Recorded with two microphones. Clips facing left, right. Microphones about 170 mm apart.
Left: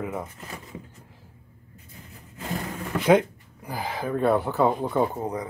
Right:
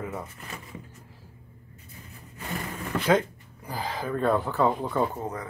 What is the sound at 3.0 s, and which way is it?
Speech, 15° left (ahead or behind).